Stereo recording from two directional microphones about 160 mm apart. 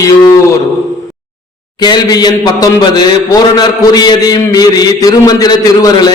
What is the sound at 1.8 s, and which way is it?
A man's voice, 25° left (ahead or behind).